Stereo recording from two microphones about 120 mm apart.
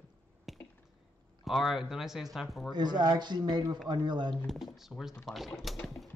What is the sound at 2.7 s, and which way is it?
Speech, 35° right (ahead or behind).